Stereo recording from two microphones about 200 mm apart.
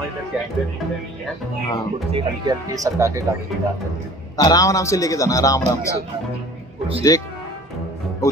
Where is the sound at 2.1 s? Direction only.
20° right (ahead or behind).